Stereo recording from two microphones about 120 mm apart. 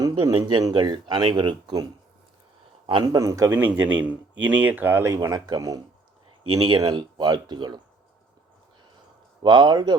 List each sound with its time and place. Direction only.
0.0 s a man's voice: 35° right (ahead or behind)
3.8 s speech: 15° right (ahead or behind); by 7.8 s 35° right (ahead or behind)
9.4 s speech: 40° right (ahead or behind)